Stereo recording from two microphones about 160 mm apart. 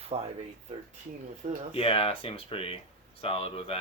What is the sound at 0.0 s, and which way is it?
Speech, 40° right (ahead or behind).